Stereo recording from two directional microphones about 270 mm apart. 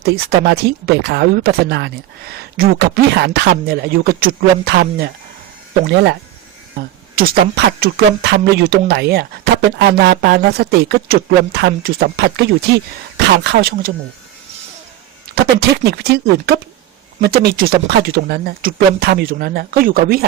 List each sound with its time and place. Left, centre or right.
0.0 s speech: right
7.2 s speech: right
15.4 s speech: right